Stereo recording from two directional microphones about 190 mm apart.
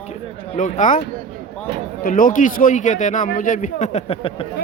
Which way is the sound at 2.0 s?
45° left (ahead or behind).